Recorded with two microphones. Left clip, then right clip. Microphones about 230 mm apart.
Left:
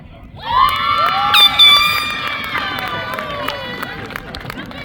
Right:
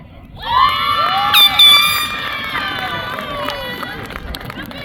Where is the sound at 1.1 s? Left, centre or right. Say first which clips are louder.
Right 1 dB; right.